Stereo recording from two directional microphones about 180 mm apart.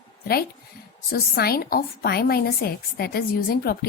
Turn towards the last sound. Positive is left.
turn(degrees=55)  # may be behind; listen again after turning